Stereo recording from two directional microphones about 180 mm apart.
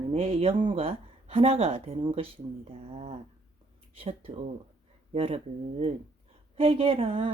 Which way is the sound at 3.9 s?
30° right (ahead or behind).